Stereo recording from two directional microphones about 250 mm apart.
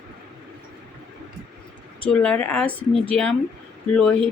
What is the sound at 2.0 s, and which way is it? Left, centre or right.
Speech, centre.